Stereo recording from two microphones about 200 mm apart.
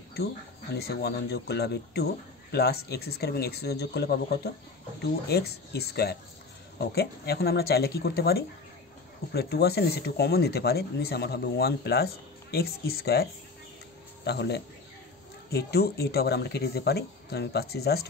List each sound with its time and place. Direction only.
0.7 s speech: 55° left (ahead or behind)